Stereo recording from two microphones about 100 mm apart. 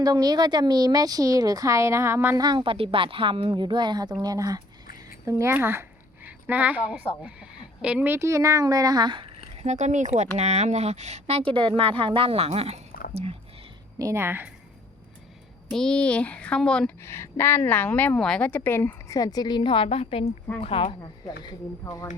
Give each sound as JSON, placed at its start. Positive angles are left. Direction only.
{"t": 0.0, "sound": "speech", "side_deg": -40}
{"t": 2.3, "sound": "a woman's voice", "side_deg": -45}
{"t": 9.6, "sound": "speech", "side_deg": -90}
{"t": 14.0, "sound": "a woman's voice", "side_deg": -25}
{"t": 15.7, "sound": "speech", "side_deg": 5}
{"t": 17.0, "sound": "a woman's voice", "side_deg": 25}
{"t": 19.1, "sound": "a woman's voice", "side_deg": 40}